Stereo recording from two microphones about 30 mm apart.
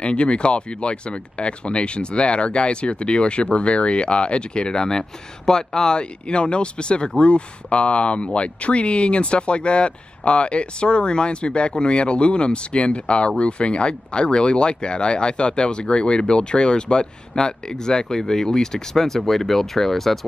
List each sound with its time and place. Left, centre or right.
0.0 s speech: left; by 20.2 s centre